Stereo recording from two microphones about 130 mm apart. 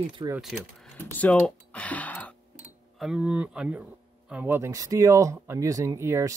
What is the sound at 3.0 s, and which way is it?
Speech, 5° right (ahead or behind).